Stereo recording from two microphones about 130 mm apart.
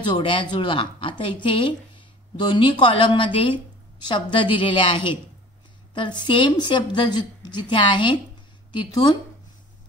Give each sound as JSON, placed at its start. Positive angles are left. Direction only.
{"t": 0.1, "sound": "a woman's voice", "side_deg": 40}